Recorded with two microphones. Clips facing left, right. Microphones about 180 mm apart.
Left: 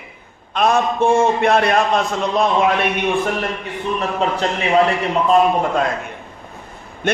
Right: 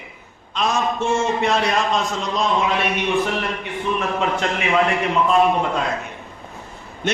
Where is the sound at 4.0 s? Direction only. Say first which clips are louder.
Left 4 dB; 35° left (ahead or behind).